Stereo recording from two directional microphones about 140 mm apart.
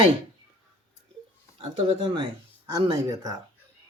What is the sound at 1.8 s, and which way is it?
Speech, 35° right (ahead or behind).